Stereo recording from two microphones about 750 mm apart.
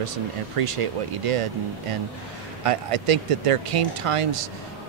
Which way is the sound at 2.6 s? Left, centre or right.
Right.